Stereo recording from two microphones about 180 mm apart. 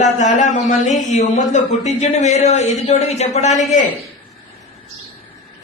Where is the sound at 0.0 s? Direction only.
40° left (ahead or behind).